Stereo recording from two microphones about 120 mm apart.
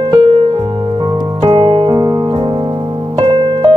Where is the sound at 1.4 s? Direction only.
50° right (ahead or behind).